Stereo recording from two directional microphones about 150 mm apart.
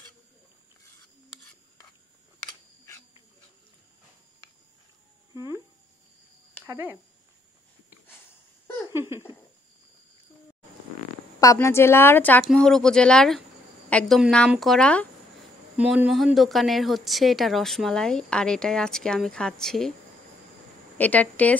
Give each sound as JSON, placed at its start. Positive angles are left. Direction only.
{"t": 6.6, "sound": "speech", "side_deg": -15}
{"t": 8.9, "sound": "a sound", "side_deg": -15}
{"t": 11.3, "sound": "a woman's voice", "side_deg": 20}
{"t": 15.8, "sound": "a woman's voice", "side_deg": -5}
{"t": 21.0, "sound": "speech", "side_deg": 10}